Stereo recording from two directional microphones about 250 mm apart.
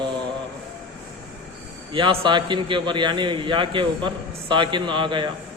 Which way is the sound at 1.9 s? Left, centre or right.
Centre.